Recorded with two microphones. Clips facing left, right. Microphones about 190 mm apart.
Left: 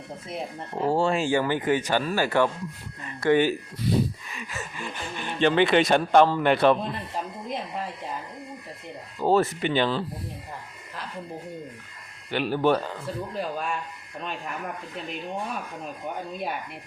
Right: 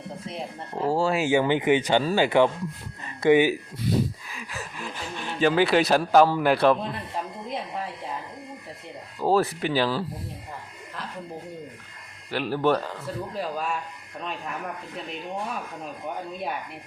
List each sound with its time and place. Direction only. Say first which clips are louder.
0.3 s speech: left 3 dB; centre (ahead or behind)
4.3 s speech: left 1 dB; centre (ahead or behind)
9.2 s speech: left 1 dB; centre (ahead or behind)
12.3 s speech: left 1 dB; centre (ahead or behind)